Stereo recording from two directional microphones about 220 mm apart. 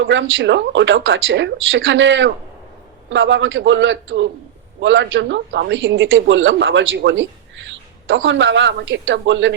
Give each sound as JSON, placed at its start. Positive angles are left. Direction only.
{"t": 0.0, "sound": "a man's voice", "side_deg": -55}